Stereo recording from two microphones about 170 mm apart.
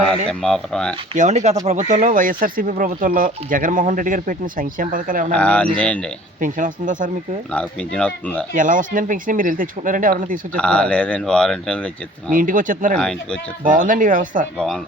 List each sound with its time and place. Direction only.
0.3 s speech: 5° left (ahead or behind)
1.1 s speech: 45° right (ahead or behind)
5.4 s speech: 10° left (ahead or behind)
6.4 s speech: 50° right (ahead or behind)
7.5 s speech: 5° left (ahead or behind)
8.5 s speech: 50° right (ahead or behind)
10.5 s speech: 5° left (ahead or behind)
12.3 s speech: 50° right (ahead or behind)
13.0 s speech: 5° left (ahead or behind)
13.7 s speech: 50° right (ahead or behind)